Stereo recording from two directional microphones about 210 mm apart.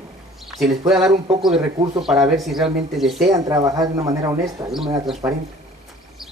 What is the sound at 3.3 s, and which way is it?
Speech, 15° right (ahead or behind).